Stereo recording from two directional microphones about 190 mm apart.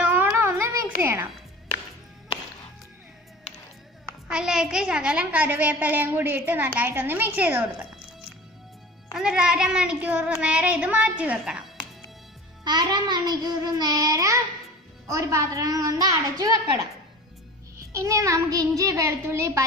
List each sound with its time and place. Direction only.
0.0 s music: 10° right (ahead or behind)
4.3 s a child's voice: 5° right (ahead or behind)
9.1 s child singing: 5° right (ahead or behind)
12.6 s child singing: 20° right (ahead or behind)
15.0 s a child's voice: 15° right (ahead or behind)
17.9 s a child's voice: 15° right (ahead or behind)